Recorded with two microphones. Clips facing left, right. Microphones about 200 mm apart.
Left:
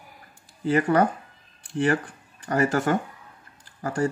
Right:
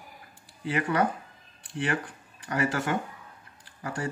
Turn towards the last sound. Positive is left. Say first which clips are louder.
# left 8 dB
turn(degrees=45)  # may be behind; listen again after turning